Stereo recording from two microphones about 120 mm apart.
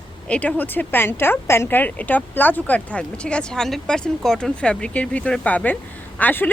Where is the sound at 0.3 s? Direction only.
10° left (ahead or behind).